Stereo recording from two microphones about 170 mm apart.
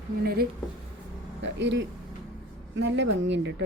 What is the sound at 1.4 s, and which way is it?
Speech, 90° right.